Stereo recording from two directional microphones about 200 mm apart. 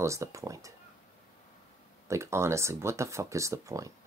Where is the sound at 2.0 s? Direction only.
15° right (ahead or behind).